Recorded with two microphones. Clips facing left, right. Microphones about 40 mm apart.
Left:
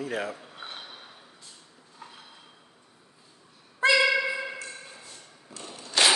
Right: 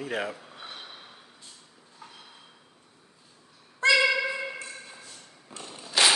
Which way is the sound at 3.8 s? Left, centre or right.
Centre.